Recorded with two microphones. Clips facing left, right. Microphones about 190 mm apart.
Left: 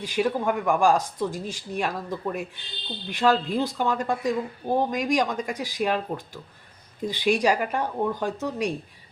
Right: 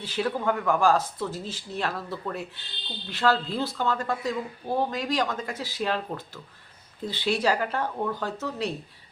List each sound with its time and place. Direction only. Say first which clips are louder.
0.0 s speech: left 3 dB; 15° left (ahead or behind)